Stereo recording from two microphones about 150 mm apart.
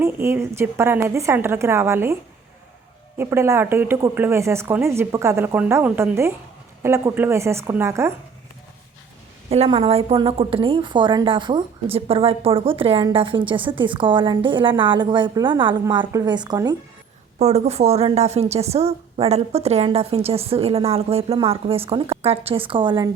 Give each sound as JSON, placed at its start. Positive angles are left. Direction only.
{"t": 0.0, "sound": "speech", "side_deg": -15}
{"t": 3.2, "sound": "speech", "side_deg": -15}
{"t": 9.5, "sound": "a woman's voice", "side_deg": -40}
{"t": 17.3, "sound": "a woman's voice", "side_deg": -45}